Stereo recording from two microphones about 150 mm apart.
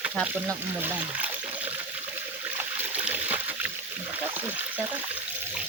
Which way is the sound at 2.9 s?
10° right (ahead or behind).